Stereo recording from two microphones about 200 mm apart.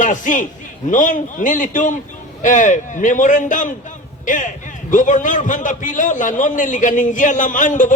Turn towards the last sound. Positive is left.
turn(degrees=40)  # may be behind; listen again after turning